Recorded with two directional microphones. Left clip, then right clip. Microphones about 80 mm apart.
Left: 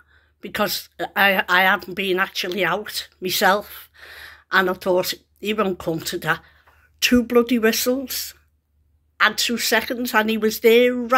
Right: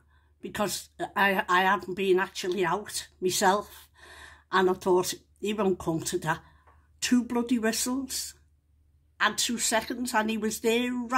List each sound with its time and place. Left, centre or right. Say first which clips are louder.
0.4 s speech: left 8 dB; right
7.0 s speech: left 11 dB; centre
9.1 s speech: left 8 dB; right
9.7 s speech: left 8 dB; centre